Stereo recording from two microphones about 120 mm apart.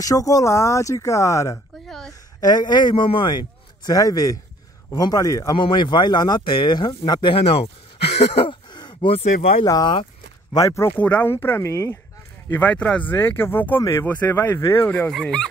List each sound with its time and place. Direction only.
0.0 s speech: 30° left (ahead or behind)
1.9 s a woman's voice: 5° left (ahead or behind)
2.4 s a man's voice: 35° left (ahead or behind)
5.6 s a man's voice: 40° left (ahead or behind); by 8.5 s 60° left (ahead or behind)
8.5 s a sound: 40° left (ahead or behind)
9.1 s speech: 55° left (ahead or behind)
9.7 s a man's voice: 35° left (ahead or behind)
10.5 s speech: 25° left (ahead or behind)
11.0 s speech: 10° left (ahead or behind)
12.4 s speech: 10° left (ahead or behind)
15.0 s speech: 5° left (ahead or behind)